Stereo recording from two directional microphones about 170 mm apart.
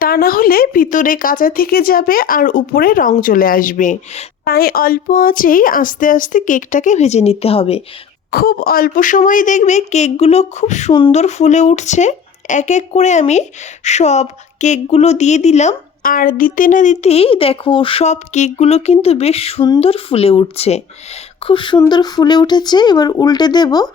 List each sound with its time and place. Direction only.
0.0 s speech: 60° left (ahead or behind); by 4.3 s 45° left (ahead or behind)
4.4 s speech: 60° left (ahead or behind); by 7.9 s 35° left (ahead or behind)
8.3 s speech: 60° left (ahead or behind); by 23.9 s 25° left (ahead or behind)